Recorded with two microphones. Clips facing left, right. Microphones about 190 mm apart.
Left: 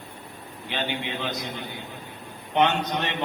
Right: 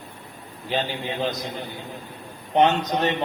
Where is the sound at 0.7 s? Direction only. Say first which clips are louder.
Right 5 dB; 40° right (ahead or behind).